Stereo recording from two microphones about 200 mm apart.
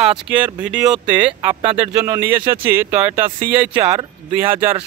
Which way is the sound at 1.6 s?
30° right (ahead or behind).